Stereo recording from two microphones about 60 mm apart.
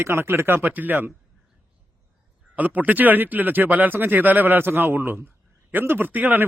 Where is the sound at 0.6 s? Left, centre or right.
Right.